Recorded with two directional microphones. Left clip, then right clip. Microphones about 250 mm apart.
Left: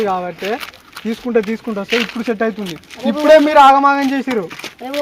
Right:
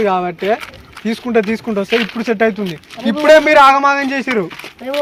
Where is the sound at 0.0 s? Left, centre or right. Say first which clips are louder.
Right 3 dB; right.